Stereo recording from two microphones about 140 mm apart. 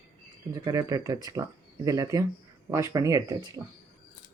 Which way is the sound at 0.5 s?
25° right (ahead or behind).